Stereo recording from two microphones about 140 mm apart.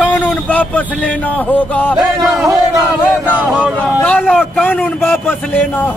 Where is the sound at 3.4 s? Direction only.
10° right (ahead or behind).